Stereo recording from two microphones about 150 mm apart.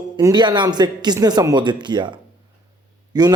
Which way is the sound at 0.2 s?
25° right (ahead or behind).